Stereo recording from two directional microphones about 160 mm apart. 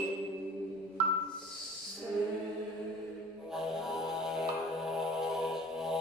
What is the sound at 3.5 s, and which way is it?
Music, centre (ahead or behind).